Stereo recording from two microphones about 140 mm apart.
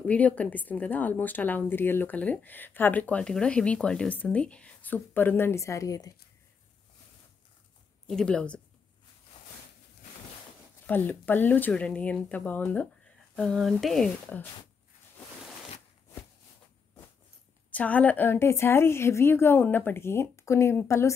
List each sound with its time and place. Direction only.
0.0 s a woman's voice: 10° left (ahead or behind); by 6.1 s 25° left (ahead or behind)
8.1 s speech: 5° left (ahead or behind)
10.9 s a woman's voice: 15° left (ahead or behind)
13.4 s speech: centre (ahead or behind)
17.6 s a woman's voice: 10° left (ahead or behind)